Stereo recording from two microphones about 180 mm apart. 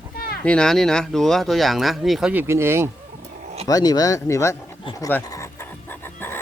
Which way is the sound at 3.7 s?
20° left (ahead or behind).